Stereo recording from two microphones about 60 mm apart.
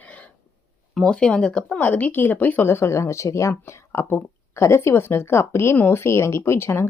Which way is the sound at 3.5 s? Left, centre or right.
Left.